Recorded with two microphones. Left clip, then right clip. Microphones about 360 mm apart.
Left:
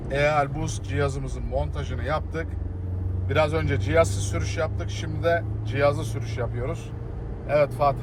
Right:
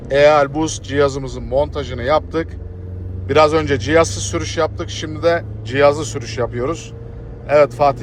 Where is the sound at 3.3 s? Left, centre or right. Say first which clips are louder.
Right 11 dB; right.